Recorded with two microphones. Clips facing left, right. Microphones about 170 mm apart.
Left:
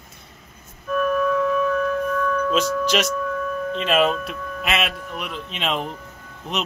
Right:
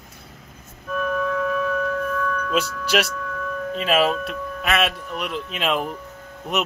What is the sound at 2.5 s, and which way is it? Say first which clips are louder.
A man's voice: right 2 dB; 10° right (ahead or behind).